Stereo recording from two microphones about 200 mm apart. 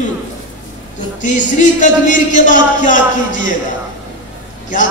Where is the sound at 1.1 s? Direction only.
40° left (ahead or behind).